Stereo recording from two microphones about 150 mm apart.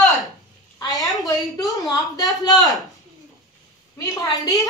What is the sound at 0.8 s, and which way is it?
A woman's voice, 25° left (ahead or behind).